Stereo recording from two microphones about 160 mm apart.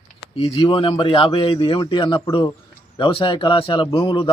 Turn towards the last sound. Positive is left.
turn(degrees=30)  # may be behind; listen again after turning